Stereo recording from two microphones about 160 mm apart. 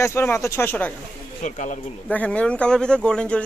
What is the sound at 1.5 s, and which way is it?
Speech, 50° left (ahead or behind).